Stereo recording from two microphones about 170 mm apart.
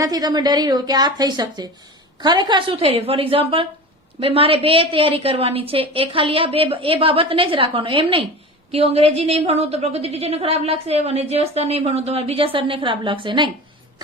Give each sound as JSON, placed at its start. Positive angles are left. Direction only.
{"t": 0.0, "sound": "a woman's voice", "side_deg": -20}